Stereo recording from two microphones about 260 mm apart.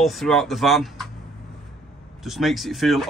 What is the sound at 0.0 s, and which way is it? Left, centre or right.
Speech, centre.